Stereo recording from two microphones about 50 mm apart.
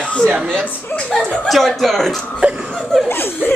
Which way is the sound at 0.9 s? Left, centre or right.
Left.